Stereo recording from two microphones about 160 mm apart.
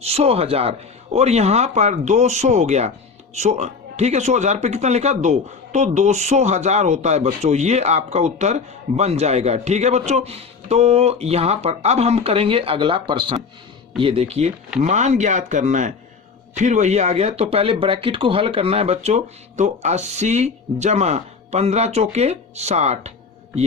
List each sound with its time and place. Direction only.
0.0 s speech: 40° right (ahead or behind)